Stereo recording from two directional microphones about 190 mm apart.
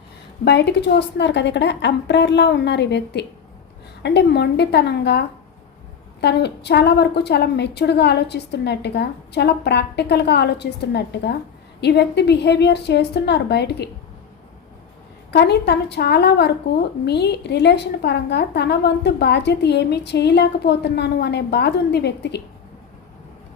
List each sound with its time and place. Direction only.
0.4 s speech: 65° left (ahead or behind)
15.3 s speech: 60° left (ahead or behind)